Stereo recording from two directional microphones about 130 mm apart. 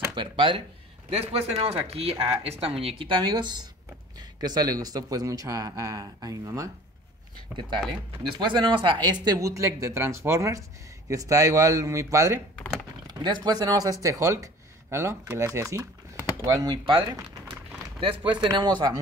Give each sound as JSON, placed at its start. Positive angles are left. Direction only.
{"t": 0.1, "sound": "speech", "side_deg": -40}
{"t": 1.1, "sound": "speech", "side_deg": -50}
{"t": 7.5, "sound": "speech", "side_deg": -5}
{"t": 8.4, "sound": "speech", "side_deg": -40}
{"t": 13.2, "sound": "speech", "side_deg": -35}
{"t": 18.0, "sound": "speech", "side_deg": -40}